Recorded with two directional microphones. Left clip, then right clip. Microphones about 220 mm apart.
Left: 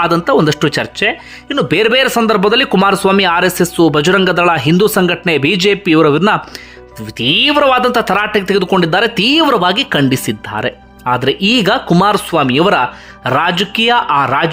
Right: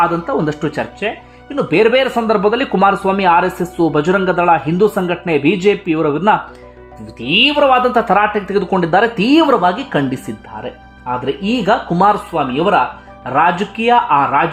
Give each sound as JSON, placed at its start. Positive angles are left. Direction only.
{"t": 0.0, "sound": "speech", "side_deg": 10}